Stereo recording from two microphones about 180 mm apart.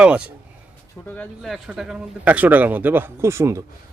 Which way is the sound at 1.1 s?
5° left (ahead or behind).